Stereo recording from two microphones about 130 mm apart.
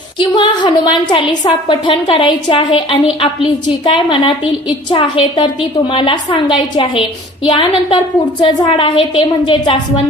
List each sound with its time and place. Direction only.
0.2 s a woman's voice: 35° left (ahead or behind)